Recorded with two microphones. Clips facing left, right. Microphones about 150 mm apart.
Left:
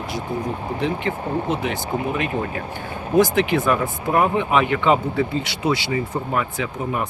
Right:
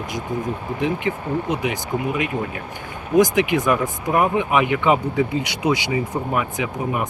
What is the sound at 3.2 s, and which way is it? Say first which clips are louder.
Speech: right 1 dB; 15° right (ahead or behind).